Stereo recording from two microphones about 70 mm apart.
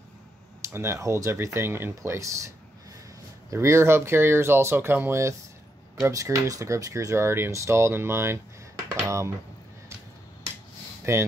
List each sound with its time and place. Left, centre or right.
0.6 s speech: right
6.0 s speech: right
11.1 s speech: right